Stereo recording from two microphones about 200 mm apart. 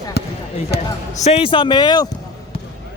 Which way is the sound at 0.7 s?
55° left (ahead or behind).